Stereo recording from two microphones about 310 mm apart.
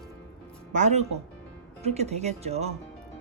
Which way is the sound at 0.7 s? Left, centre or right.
Right.